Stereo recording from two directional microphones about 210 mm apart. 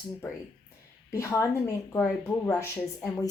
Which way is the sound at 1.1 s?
15° left (ahead or behind).